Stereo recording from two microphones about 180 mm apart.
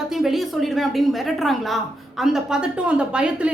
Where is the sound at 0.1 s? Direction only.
Centre (ahead or behind).